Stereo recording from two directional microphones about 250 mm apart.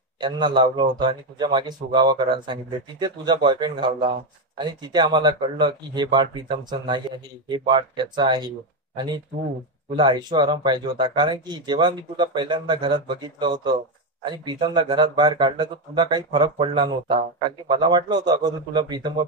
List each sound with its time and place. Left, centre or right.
0.2 s speech: centre
9.9 s speech: centre